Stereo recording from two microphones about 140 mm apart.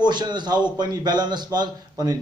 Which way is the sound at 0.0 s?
30° right (ahead or behind).